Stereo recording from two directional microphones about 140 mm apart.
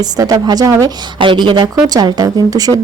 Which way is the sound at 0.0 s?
25° right (ahead or behind).